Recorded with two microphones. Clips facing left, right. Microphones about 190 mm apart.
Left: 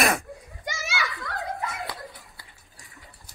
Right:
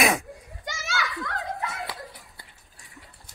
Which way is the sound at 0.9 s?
Centre (ahead or behind).